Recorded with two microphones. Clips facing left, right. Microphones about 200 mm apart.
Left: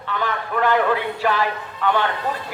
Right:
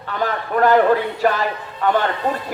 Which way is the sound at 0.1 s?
40° right (ahead or behind).